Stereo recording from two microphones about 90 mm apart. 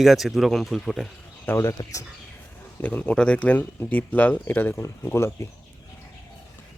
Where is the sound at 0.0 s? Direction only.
Centre (ahead or behind).